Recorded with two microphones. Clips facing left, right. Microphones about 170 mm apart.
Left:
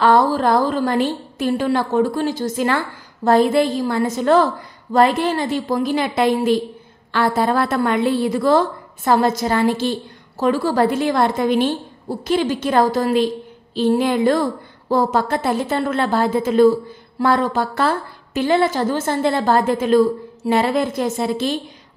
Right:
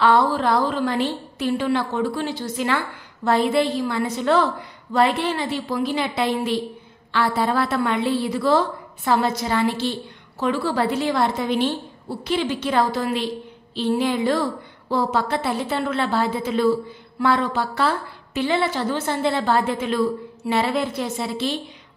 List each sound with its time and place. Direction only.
0.0 s a woman's voice: 40° left (ahead or behind)